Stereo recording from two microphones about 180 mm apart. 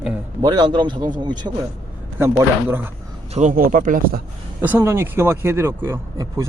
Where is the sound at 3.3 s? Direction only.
40° right (ahead or behind).